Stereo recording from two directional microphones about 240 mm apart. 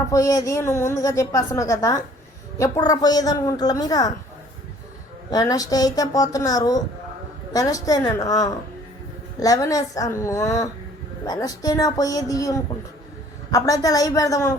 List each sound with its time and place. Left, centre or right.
0.1 s a woman's voice: centre
5.3 s a woman's voice: centre